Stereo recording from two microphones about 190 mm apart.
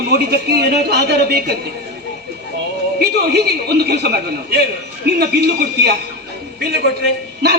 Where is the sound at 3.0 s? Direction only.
55° right (ahead or behind).